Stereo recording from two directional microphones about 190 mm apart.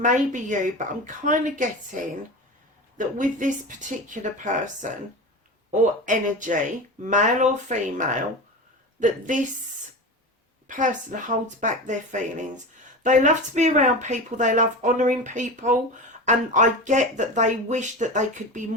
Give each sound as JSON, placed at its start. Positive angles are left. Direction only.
{"t": 0.0, "sound": "speech", "side_deg": -40}
{"t": 3.0, "sound": "speech", "side_deg": -40}
{"t": 10.7, "sound": "speech", "side_deg": -40}